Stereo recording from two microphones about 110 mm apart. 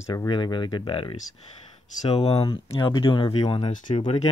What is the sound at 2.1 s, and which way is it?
Speech, 65° left (ahead or behind).